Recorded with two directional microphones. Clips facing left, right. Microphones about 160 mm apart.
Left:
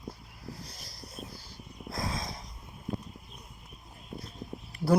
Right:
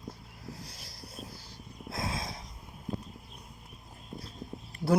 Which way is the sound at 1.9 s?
30° right (ahead or behind).